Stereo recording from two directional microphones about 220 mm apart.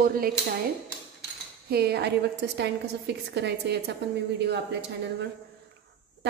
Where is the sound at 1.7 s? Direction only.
45° right (ahead or behind).